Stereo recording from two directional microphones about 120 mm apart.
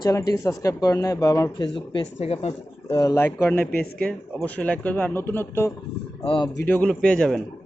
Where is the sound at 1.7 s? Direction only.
45° left (ahead or behind).